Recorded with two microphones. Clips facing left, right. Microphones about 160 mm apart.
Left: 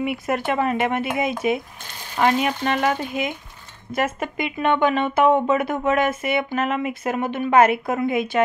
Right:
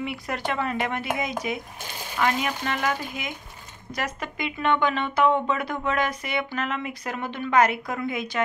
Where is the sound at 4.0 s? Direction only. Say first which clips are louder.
Left 7 dB; 20° left (ahead or behind).